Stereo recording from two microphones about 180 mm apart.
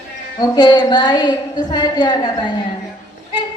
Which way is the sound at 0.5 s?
25° left (ahead or behind).